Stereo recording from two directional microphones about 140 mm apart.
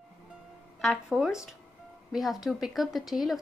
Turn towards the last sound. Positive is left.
turn(degrees=0)  # may be behind; listen again after turning